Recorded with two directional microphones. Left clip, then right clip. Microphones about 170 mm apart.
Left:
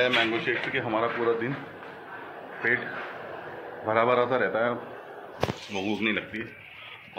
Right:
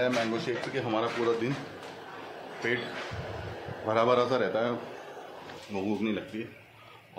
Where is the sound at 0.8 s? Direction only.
15° right (ahead or behind).